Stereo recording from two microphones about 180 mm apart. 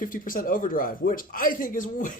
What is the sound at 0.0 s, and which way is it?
Speech, 50° left (ahead or behind).